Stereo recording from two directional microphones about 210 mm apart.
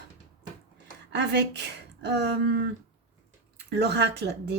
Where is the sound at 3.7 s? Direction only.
50° right (ahead or behind).